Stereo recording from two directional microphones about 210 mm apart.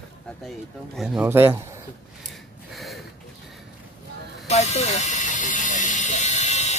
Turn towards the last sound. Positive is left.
turn(degrees=35)  # may be behind; listen again after turning